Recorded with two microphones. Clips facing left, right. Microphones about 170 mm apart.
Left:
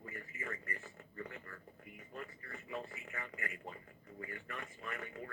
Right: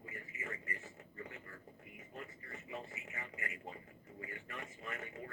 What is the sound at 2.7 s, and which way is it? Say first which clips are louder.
Speech: left 3 dB; 20° right (ahead or behind).